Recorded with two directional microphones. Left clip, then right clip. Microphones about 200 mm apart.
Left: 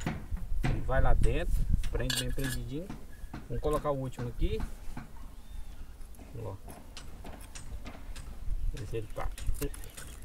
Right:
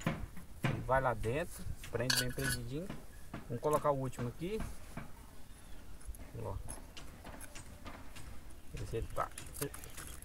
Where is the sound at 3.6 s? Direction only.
5° left (ahead or behind).